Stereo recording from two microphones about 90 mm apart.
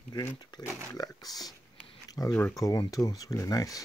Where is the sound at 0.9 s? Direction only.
40° left (ahead or behind).